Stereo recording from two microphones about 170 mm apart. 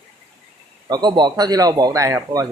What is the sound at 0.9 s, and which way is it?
Speech, 25° right (ahead or behind).